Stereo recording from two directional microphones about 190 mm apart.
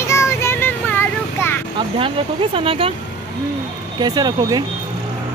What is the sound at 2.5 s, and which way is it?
Speech, 30° right (ahead or behind).